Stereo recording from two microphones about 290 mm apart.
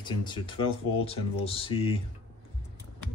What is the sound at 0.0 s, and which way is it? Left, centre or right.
Speech, centre.